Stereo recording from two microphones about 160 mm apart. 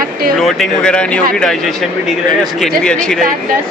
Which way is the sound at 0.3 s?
Centre (ahead or behind).